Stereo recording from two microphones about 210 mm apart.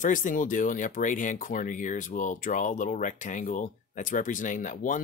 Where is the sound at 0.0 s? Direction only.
40° left (ahead or behind).